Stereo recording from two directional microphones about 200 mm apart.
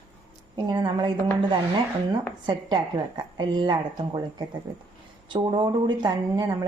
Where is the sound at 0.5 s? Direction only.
20° right (ahead or behind).